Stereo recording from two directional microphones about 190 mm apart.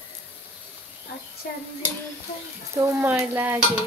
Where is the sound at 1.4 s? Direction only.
50° left (ahead or behind).